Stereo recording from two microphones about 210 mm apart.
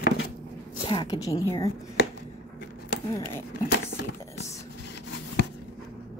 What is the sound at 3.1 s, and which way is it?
Speech, 15° left (ahead or behind).